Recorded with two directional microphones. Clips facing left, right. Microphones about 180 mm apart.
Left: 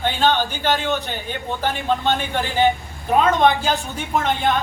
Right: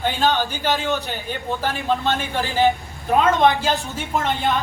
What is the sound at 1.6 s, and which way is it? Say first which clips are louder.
Speech: left 2 dB; centre (ahead or behind).